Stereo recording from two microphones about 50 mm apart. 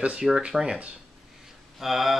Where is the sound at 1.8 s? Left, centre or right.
Centre.